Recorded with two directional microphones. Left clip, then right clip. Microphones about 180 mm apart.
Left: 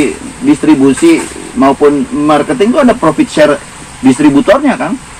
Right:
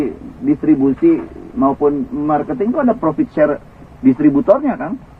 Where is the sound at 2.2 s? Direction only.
35° left (ahead or behind).